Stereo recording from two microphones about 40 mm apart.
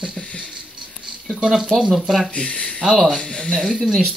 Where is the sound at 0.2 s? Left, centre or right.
Left.